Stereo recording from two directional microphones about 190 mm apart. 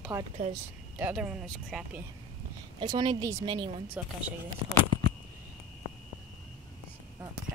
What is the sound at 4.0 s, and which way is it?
Speech, 10° right (ahead or behind).